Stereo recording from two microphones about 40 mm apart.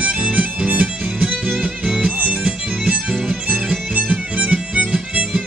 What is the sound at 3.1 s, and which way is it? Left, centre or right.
Music, centre.